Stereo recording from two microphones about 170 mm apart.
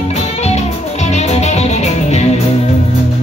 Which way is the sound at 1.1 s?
40° left (ahead or behind).